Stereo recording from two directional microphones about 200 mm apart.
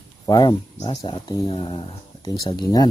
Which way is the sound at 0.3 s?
20° left (ahead or behind).